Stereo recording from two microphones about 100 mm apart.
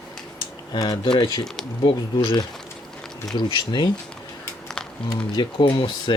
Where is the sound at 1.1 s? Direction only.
60° left (ahead or behind).